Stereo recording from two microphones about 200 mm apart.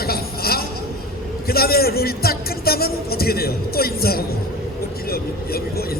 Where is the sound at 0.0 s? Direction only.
50° left (ahead or behind).